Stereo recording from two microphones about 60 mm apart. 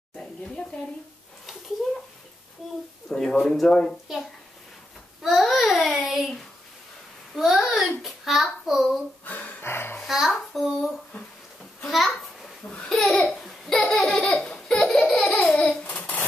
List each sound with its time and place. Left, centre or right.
0.1 s a sound: centre
3.1 s speech: centre
5.2 s child singing: centre
7.3 s a sound: centre
8.0 s a child's voice: centre
9.2 s a sound: left
9.7 s music: left
10.0 s a sound: centre
11.9 s a child's voice: centre
12.6 s laughter: centre
15.7 s babbling: left
16.0 s dishes: left